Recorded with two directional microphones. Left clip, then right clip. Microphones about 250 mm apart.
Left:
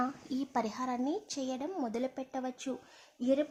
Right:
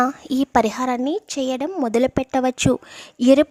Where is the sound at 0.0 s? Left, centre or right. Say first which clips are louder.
Right 15 dB; right.